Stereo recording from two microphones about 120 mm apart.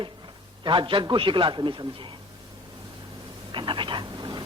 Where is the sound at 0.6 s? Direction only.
40° right (ahead or behind).